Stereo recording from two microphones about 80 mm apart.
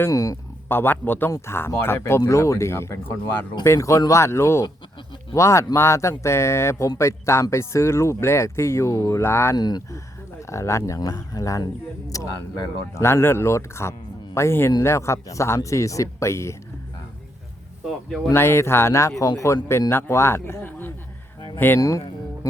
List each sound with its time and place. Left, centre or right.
0.1 s speech: left
0.7 s speech: left
9.2 s speech: left
9.6 s speech: left
10.5 s speech: left
18.3 s speech: left
21.8 s speech: left